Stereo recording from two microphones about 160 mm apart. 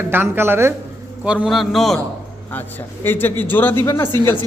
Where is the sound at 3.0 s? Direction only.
15° left (ahead or behind).